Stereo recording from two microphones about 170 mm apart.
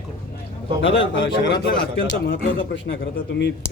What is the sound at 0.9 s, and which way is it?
Speech, 90° left.